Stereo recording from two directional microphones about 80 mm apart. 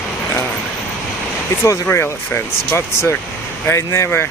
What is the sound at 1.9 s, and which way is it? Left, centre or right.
Speech, left.